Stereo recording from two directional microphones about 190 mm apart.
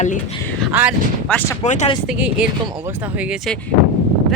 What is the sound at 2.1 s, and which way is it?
Speech, 5° right (ahead or behind).